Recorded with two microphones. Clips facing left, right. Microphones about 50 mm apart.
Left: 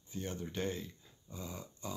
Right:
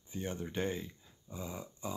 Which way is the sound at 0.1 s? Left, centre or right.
Centre.